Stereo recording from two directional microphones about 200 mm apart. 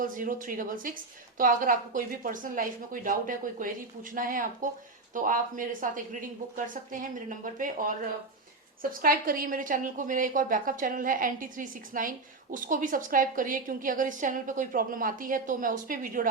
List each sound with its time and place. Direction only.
0.0 s a woman's voice: 40° right (ahead or behind)
6.9 s speech: 40° right (ahead or behind)
8.8 s a woman's voice: 45° right (ahead or behind)